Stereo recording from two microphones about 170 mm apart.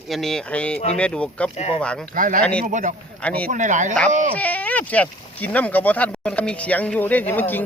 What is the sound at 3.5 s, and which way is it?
Speech, 45° right (ahead or behind).